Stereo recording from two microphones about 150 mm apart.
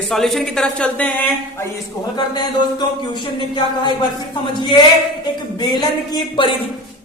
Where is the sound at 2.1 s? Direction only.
30° left (ahead or behind).